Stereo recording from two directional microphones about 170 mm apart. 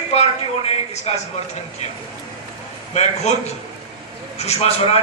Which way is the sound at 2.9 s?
40° left (ahead or behind).